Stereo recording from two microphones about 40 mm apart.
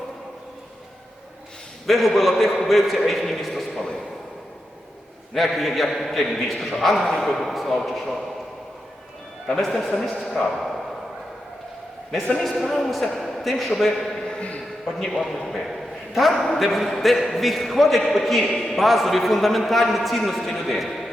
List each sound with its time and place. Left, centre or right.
1.9 s a man's voice: centre
5.3 s a man's voice: centre
9.6 s a man's voice: centre
10.5 s a sound: centre
12.4 s a man's voice: centre
14.3 s a sound: left
14.9 s a man's voice: centre
15.2 s a man's voice: centre